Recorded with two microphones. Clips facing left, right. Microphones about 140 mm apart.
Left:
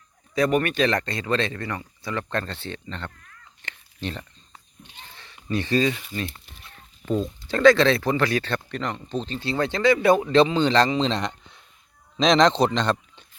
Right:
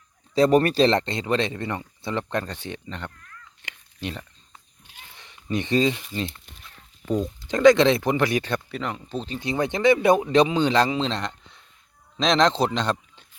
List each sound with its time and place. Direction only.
0.3 s speech: 30° right (ahead or behind); by 3.1 s 15° right (ahead or behind)
3.6 s a sound: 10° right (ahead or behind)
4.8 s speech: 15° right (ahead or behind)
5.9 s speech: centre (ahead or behind)
7.0 s speech: 15° right (ahead or behind)